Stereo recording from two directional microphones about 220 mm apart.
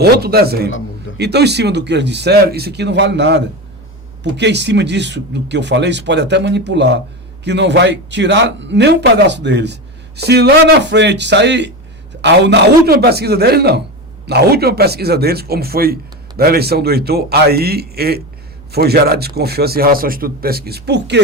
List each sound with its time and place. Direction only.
0.0 s speech: 45° right (ahead or behind)